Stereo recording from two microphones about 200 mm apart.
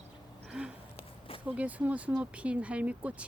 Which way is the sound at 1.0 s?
30° left (ahead or behind).